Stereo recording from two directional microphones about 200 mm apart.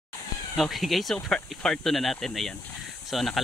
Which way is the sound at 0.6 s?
Centre (ahead or behind).